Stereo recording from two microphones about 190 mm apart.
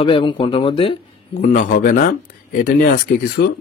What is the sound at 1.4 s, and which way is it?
A man's voice, 45° left (ahead or behind).